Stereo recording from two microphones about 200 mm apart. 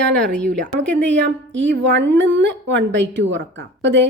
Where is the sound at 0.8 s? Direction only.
65° right (ahead or behind).